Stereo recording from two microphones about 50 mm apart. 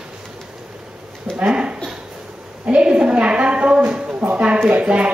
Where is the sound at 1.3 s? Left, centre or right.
Right.